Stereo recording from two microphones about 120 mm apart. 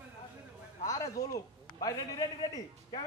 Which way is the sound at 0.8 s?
30° left (ahead or behind).